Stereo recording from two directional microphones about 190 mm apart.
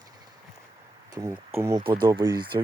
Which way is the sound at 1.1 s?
15° right (ahead or behind).